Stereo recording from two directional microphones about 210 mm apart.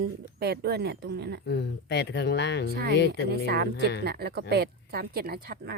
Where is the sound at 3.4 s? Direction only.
50° right (ahead or behind).